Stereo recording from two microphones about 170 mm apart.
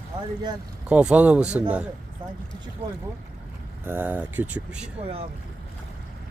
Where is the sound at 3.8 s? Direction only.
10° right (ahead or behind).